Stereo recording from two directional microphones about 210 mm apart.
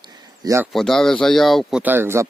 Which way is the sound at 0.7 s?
Centre (ahead or behind).